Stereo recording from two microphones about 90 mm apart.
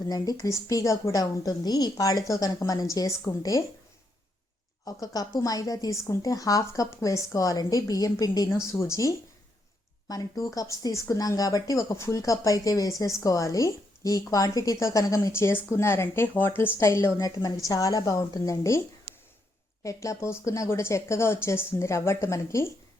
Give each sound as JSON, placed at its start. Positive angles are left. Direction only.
{"t": 0.1, "sound": "a woman's voice", "side_deg": 40}
{"t": 4.9, "sound": "a woman's voice", "side_deg": 45}
{"t": 10.1, "sound": "a woman's voice", "side_deg": 45}
{"t": 17.2, "sound": "a woman's voice", "side_deg": 40}
{"t": 19.8, "sound": "a woman's voice", "side_deg": 35}